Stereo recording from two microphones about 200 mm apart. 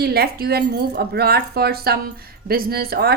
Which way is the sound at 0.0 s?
50° right (ahead or behind).